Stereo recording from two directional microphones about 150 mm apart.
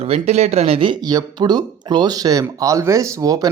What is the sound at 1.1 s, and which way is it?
Speech, 25° right (ahead or behind).